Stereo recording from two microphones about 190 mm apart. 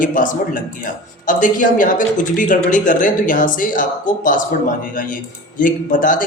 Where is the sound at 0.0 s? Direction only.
45° left (ahead or behind).